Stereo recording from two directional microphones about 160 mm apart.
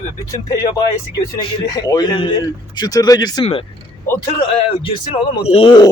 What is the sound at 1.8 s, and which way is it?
Speech, 25° left (ahead or behind).